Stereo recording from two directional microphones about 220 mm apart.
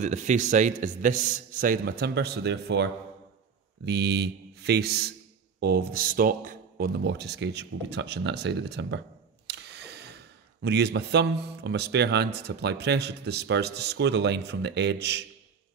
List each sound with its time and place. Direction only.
0.0 s speech: 35° right (ahead or behind); by 9.0 s 50° right (ahead or behind)
9.5 s a sound: 50° right (ahead or behind)
10.6 s speech: 50° right (ahead or behind)